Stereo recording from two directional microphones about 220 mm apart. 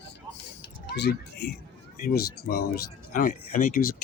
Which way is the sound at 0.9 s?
50° left (ahead or behind).